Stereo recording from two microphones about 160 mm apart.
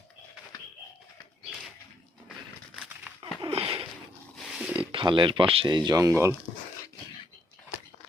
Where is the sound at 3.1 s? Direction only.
10° right (ahead or behind).